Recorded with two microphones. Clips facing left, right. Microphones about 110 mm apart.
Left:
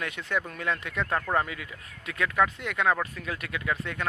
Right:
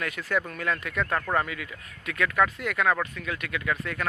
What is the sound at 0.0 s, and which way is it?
Speech, 25° left (ahead or behind).